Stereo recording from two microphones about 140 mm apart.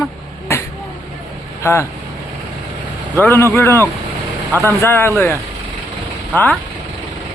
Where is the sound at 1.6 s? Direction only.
20° left (ahead or behind).